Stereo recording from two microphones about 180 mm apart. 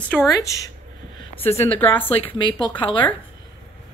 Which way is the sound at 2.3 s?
25° left (ahead or behind).